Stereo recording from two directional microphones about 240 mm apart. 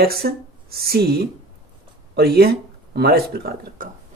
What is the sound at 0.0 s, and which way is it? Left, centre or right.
A woman's voice, right.